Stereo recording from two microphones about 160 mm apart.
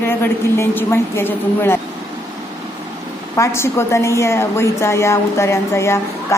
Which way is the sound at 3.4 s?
15° left (ahead or behind).